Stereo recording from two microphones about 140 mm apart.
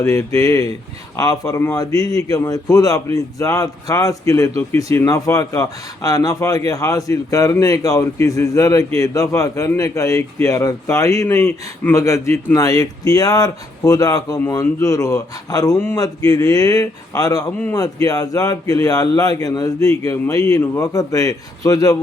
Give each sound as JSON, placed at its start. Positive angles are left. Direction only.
{"t": 0.0, "sound": "a man's voice", "side_deg": 20}